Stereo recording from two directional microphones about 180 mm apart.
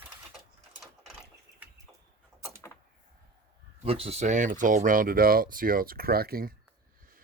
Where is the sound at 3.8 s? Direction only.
30° right (ahead or behind).